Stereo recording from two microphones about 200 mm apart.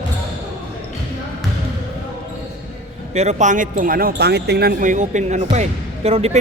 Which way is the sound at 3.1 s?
35° right (ahead or behind).